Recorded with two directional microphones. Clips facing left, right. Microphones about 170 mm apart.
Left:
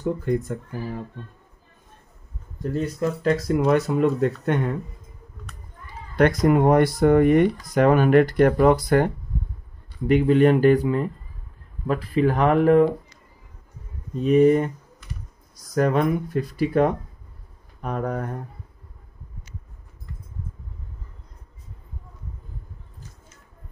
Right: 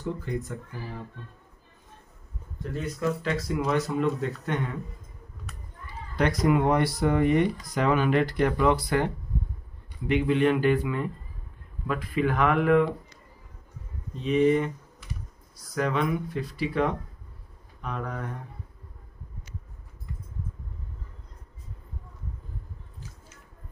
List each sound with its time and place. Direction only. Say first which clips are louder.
0.0 s speech: left 8 dB; 50° left (ahead or behind)
2.7 s speech: left 4 dB; 40° left (ahead or behind)
6.1 s speech: left 5 dB; 50° left (ahead or behind)
14.1 s speech: left 6 dB; 45° left (ahead or behind)
15.7 s speech: left 6 dB; 45° left (ahead or behind)